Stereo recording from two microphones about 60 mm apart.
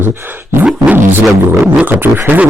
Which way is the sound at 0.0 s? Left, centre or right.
Right.